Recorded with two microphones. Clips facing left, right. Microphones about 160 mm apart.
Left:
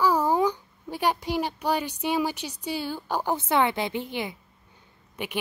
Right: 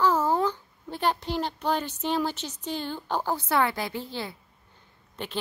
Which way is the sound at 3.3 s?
20° left (ahead or behind).